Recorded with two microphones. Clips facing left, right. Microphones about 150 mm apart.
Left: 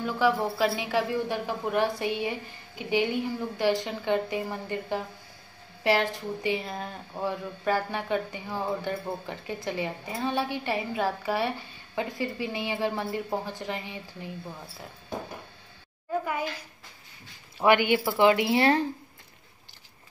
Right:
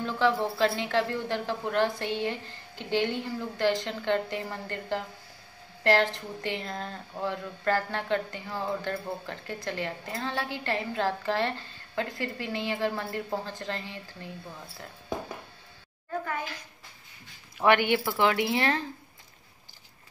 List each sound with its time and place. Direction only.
0.0 s a woman's voice: 10° left (ahead or behind)
16.1 s a sound: 15° left (ahead or behind)
17.6 s a woman's voice: 5° left (ahead or behind)